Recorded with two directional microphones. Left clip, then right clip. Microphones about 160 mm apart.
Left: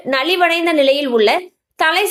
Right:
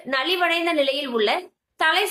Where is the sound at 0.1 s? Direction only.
50° left (ahead or behind).